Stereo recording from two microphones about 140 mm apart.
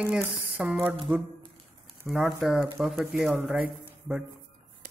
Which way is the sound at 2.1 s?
Centre (ahead or behind).